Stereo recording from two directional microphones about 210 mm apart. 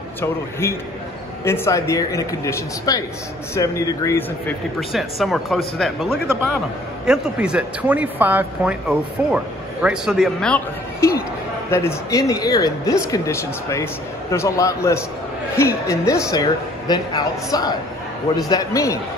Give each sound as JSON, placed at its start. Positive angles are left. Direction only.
{"t": 0.2, "sound": "speech", "side_deg": 10}
{"t": 4.7, "sound": "speech", "side_deg": 0}